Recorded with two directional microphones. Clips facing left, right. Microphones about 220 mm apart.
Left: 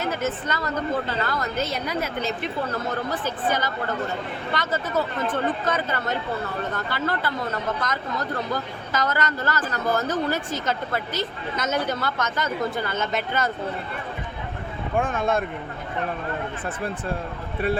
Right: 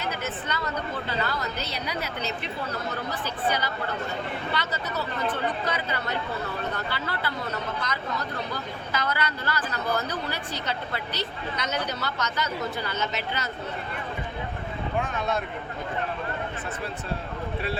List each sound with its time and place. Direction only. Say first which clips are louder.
0.0 s a woman's voice: left 6 dB; 45° left (ahead or behind)
14.9 s speech: left 6 dB; 50° left (ahead or behind)